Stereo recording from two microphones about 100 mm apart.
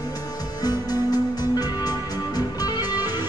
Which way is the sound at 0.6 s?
40° left (ahead or behind).